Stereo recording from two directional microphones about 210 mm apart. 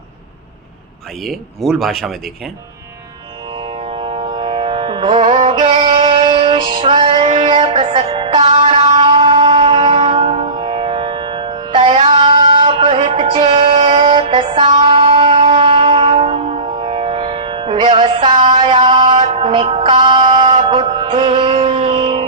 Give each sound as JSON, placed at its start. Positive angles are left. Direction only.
{"t": 1.2, "sound": "speech", "side_deg": 0}
{"t": 3.6, "sound": "music", "side_deg": -25}